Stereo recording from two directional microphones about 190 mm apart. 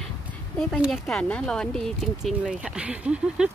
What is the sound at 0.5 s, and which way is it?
Speech, centre (ahead or behind).